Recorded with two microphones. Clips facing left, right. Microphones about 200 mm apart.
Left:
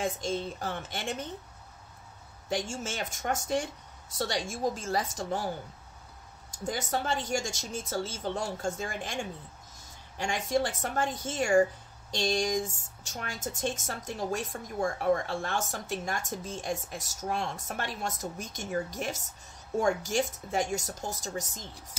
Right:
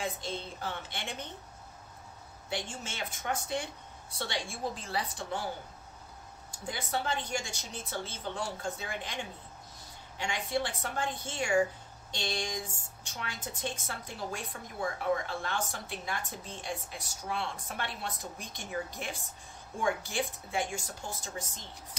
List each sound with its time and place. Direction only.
0.0 s a woman's voice: 45° left (ahead or behind)
2.5 s a woman's voice: 45° left (ahead or behind)
6.6 s a woman's voice: 45° left (ahead or behind)